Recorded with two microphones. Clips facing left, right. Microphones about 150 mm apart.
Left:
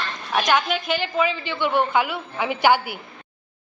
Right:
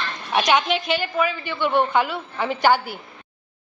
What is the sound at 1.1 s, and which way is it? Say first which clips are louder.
Speech: even; 20° left (ahead or behind).